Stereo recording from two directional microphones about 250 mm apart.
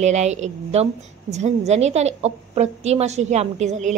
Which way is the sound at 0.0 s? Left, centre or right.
Right.